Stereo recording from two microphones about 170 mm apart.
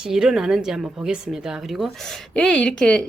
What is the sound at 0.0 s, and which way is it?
Speech, 5° right (ahead or behind).